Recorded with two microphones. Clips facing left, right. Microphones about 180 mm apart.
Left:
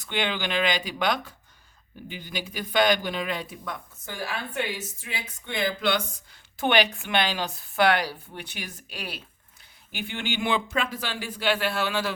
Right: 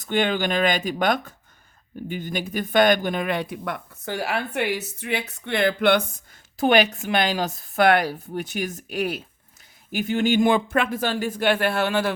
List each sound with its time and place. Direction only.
0.0 s a woman's voice: 45° right (ahead or behind); by 6.0 s 60° right (ahead or behind)
6.6 s a woman's voice: 40° right (ahead or behind)